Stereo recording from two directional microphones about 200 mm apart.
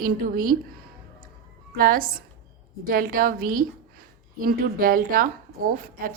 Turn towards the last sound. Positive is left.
turn(degrees=-45)  # may be behind; listen again after turning